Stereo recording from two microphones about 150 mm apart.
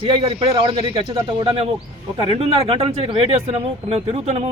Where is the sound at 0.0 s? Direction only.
35° right (ahead or behind).